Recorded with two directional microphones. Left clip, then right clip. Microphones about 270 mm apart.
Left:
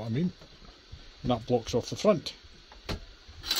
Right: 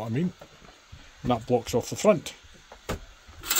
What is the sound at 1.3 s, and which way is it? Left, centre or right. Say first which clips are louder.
Speech: right 3 dB; centre.